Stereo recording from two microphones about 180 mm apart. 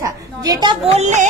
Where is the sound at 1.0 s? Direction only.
40° right (ahead or behind).